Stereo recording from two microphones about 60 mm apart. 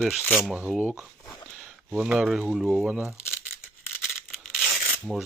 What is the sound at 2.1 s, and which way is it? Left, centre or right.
Speech, centre.